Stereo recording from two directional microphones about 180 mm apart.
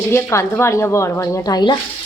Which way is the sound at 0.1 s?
15° left (ahead or behind).